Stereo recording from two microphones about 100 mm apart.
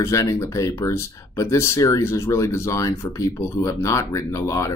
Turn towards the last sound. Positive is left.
turn(degrees=30)  # may be behind; listen again after turning